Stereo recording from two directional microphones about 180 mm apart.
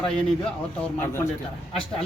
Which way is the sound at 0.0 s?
5° left (ahead or behind).